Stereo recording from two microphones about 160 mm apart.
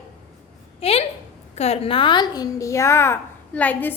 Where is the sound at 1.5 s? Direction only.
40° left (ahead or behind).